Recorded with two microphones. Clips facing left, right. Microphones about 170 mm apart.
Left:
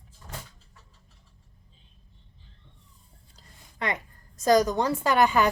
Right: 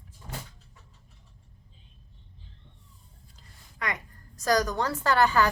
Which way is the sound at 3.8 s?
25° left (ahead or behind).